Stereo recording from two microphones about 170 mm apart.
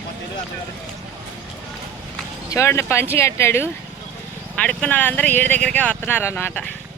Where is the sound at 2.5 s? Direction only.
15° left (ahead or behind).